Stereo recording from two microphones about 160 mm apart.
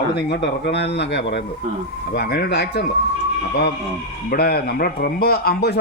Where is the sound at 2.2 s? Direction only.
80° left.